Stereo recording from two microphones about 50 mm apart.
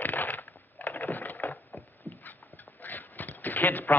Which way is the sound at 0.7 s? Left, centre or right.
Left.